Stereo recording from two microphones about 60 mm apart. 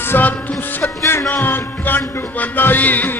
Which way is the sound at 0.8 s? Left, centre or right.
Left.